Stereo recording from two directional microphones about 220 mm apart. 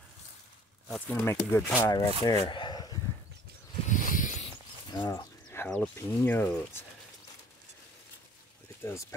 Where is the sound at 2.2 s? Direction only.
20° left (ahead or behind).